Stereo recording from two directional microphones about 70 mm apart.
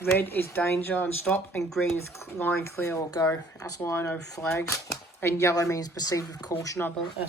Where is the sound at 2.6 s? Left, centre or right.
Left.